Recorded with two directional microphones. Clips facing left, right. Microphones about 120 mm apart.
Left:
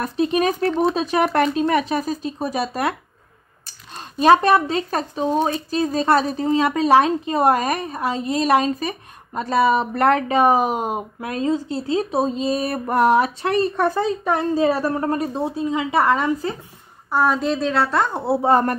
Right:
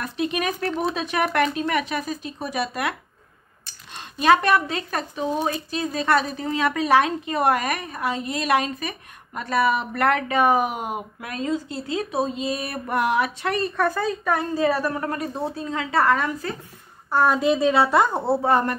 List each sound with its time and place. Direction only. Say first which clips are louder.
0.0 s speech: left 6 dB; 35° left (ahead or behind)
17.1 s a woman's voice: even; centre (ahead or behind)